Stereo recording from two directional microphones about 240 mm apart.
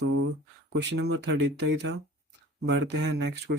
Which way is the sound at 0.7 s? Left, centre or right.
Right.